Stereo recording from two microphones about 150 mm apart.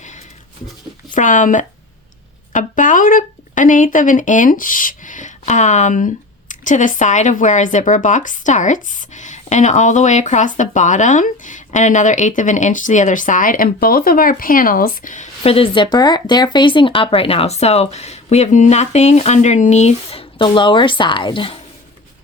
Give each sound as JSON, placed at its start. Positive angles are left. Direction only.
{"t": 1.1, "sound": "speech", "side_deg": 55}